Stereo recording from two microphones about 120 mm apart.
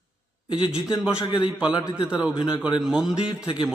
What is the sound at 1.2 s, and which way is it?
Speech, 40° left (ahead or behind).